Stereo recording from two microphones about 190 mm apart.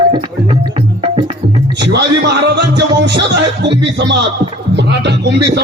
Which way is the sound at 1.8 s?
60° right (ahead or behind).